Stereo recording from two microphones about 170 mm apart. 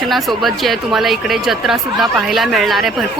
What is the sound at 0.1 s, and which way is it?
Speech, centre (ahead or behind).